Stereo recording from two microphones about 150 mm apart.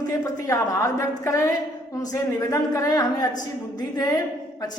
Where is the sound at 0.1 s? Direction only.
20° left (ahead or behind).